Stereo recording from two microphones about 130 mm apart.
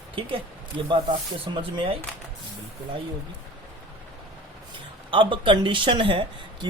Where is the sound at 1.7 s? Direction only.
45° right (ahead or behind).